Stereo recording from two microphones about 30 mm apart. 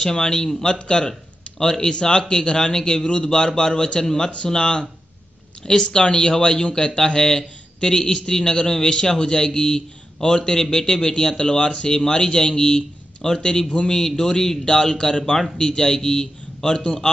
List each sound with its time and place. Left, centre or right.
0.0 s a man's voice: left
4.0 s speech: centre
4.6 s speech: left
5.7 s a man's voice: left